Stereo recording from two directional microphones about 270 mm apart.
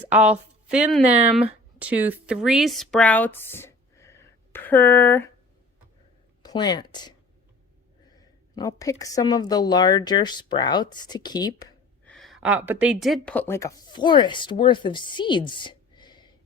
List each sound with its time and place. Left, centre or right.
0.1 s speech: centre
6.4 s speech: centre
8.5 s a woman's voice: centre
12.1 s speech: centre